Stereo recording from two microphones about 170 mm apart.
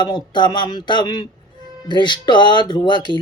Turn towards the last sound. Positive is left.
turn(degrees=25)  # may be behind; listen again after turning